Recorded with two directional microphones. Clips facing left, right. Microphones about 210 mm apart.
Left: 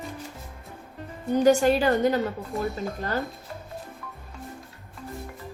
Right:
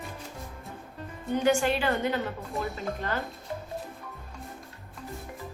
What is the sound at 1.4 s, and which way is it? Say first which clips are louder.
Speech: left 6 dB; 40° left (ahead or behind).